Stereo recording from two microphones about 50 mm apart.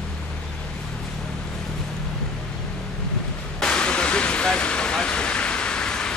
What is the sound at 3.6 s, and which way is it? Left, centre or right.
Vehicle, centre.